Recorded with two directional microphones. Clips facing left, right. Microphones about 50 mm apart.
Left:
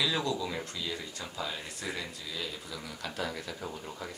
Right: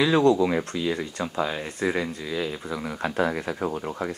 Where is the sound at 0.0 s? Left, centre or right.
Right.